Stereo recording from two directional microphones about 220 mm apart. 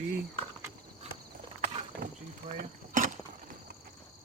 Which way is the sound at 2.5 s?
35° right (ahead or behind).